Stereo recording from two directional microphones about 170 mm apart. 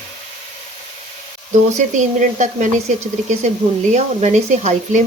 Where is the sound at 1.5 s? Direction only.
45° right (ahead or behind).